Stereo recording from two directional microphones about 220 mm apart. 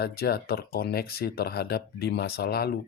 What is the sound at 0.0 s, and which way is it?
Speech, 45° left (ahead or behind).